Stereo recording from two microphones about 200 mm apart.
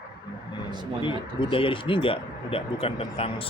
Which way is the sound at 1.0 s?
25° left (ahead or behind).